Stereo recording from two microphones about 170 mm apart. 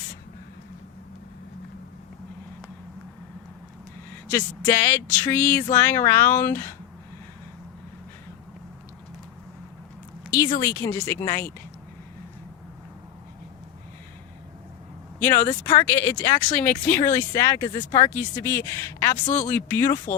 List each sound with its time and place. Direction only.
4.3 s speech: 15° left (ahead or behind)
10.3 s speech: 20° left (ahead or behind)
15.2 s speech: 15° left (ahead or behind)